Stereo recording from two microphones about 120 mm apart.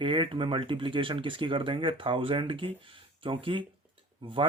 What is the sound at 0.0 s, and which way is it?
Speech, 45° right (ahead or behind).